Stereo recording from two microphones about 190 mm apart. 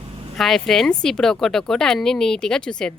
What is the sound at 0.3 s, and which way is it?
Speech, centre (ahead or behind).